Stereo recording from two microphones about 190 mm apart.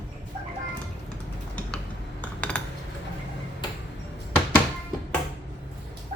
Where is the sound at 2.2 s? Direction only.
5° left (ahead or behind).